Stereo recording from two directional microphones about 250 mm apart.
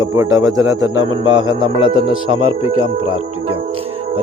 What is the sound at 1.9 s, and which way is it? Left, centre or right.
Speech, right.